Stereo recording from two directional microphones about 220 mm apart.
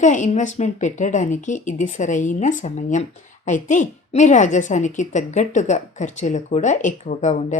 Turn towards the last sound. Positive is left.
turn(degrees=30)  # may be behind; listen again after turning